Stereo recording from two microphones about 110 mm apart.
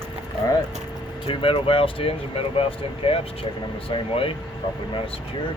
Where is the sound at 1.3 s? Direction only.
55° left (ahead or behind).